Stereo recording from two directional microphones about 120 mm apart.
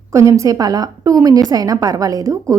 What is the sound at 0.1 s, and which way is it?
A woman's voice, 25° right (ahead or behind).